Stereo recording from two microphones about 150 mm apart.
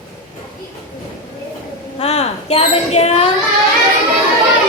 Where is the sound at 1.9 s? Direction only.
45° left (ahead or behind).